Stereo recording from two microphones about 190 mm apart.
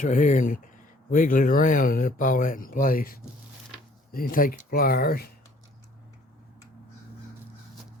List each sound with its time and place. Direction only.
0.0 s speech: 40° left (ahead or behind)